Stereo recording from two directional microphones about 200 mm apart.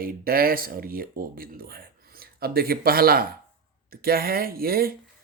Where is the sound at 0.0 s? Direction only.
50° right (ahead or behind).